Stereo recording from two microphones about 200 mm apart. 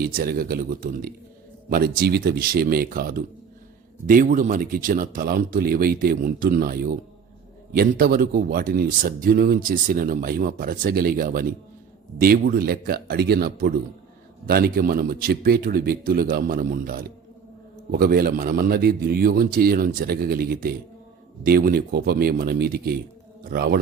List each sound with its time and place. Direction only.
0.0 s a man's voice: 50° right (ahead or behind)